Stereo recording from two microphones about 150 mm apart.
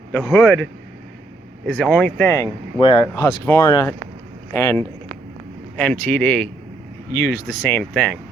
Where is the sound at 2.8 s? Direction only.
30° left (ahead or behind).